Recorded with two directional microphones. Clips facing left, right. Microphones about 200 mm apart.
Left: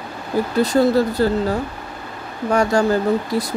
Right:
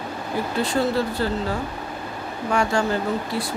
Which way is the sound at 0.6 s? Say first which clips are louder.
Left 7 dB; 40° left (ahead or behind).